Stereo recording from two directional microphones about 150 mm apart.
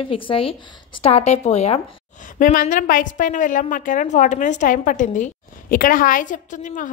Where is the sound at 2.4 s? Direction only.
65° left (ahead or behind).